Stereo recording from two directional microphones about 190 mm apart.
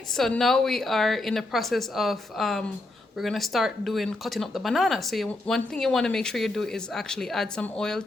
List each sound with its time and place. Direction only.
0.2 s speech: centre (ahead or behind)